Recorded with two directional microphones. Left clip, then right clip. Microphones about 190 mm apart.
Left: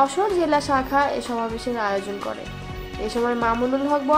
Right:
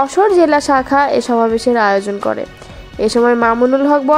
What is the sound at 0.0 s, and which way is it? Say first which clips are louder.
A woman's voice: right 9 dB; 40° right (ahead or behind).